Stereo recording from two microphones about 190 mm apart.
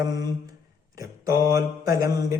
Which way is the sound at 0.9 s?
20° right (ahead or behind).